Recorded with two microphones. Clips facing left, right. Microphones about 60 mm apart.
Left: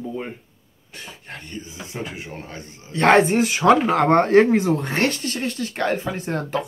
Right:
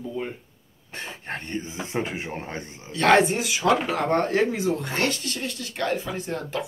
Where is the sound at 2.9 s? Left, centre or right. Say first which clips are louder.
Left 3 dB; left.